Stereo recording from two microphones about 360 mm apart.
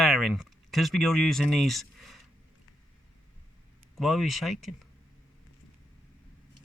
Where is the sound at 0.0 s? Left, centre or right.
Centre.